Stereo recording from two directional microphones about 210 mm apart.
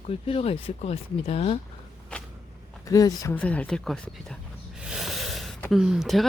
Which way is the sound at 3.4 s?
5° left (ahead or behind).